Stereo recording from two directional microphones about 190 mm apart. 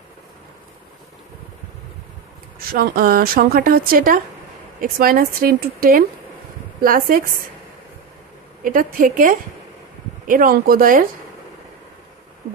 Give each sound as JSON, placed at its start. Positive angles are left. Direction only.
{"t": 2.7, "sound": "a woman's voice", "side_deg": -55}
{"t": 8.6, "sound": "a woman's voice", "side_deg": -45}